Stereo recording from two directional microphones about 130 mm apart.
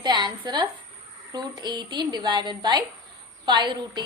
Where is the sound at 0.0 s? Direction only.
35° right (ahead or behind).